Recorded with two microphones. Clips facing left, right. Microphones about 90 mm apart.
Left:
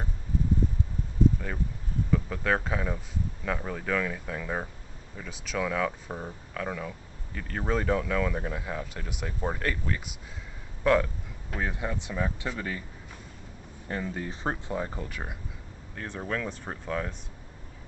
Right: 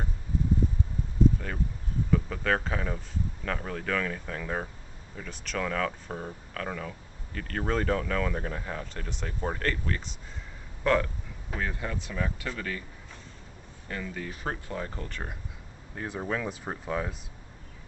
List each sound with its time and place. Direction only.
2.0 s speech: centre (ahead or behind)
11.6 s speech: 15° left (ahead or behind)
13.8 s speech: 25° left (ahead or behind); by 15.3 s 10° left (ahead or behind)
15.9 s speech: 10° right (ahead or behind)